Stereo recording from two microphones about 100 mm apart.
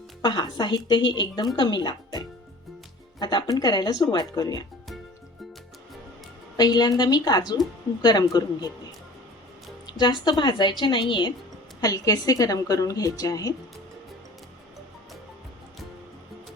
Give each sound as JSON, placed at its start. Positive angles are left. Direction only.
{"t": 0.2, "sound": "speech", "side_deg": 50}
{"t": 3.2, "sound": "speech", "side_deg": 45}
{"t": 6.6, "sound": "speech", "side_deg": 40}
{"t": 9.8, "sound": "speech", "side_deg": 45}
{"t": 11.8, "sound": "a woman's voice", "side_deg": 35}